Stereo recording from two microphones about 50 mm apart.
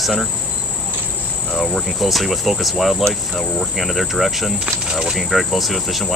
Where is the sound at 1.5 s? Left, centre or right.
Centre.